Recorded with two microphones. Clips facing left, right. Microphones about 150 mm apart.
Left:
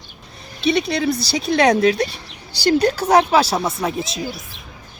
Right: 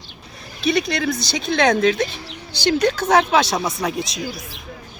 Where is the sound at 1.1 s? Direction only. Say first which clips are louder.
Left 3 dB; 35° left (ahead or behind).